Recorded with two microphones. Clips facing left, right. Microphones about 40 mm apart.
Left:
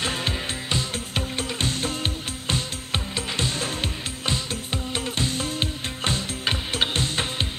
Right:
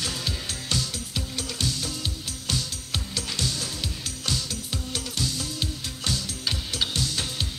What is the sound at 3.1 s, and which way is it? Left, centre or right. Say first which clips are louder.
Music: left 2 dB; left.